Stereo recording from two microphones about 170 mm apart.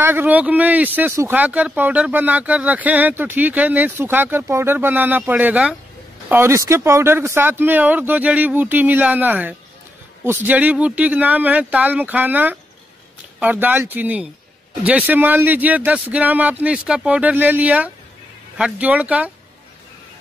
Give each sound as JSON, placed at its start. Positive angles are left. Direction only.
{"t": 0.0, "sound": "speech", "side_deg": -10}